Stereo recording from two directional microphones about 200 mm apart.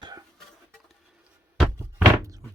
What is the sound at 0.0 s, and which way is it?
Music, 20° right (ahead or behind).